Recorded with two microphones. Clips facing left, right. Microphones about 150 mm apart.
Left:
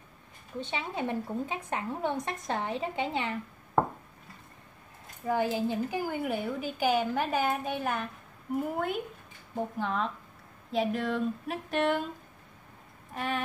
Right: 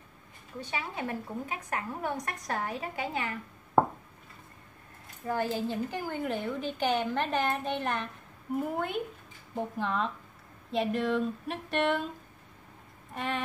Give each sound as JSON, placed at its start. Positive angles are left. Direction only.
{"t": 0.6, "sound": "a woman's voice", "side_deg": 25}
{"t": 5.3, "sound": "a woman's voice", "side_deg": 15}
{"t": 13.1, "sound": "a sound", "side_deg": 0}